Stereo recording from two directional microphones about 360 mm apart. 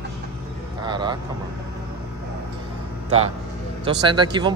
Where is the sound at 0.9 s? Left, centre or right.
Centre.